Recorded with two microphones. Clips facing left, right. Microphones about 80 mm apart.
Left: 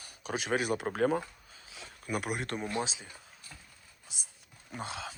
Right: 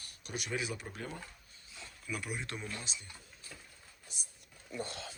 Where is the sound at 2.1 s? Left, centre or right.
Left.